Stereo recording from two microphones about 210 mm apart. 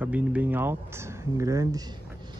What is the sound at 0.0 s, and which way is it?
Speech, 5° right (ahead or behind).